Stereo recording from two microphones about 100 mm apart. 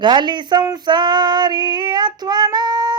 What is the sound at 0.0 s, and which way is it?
Female singing, 50° right (ahead or behind).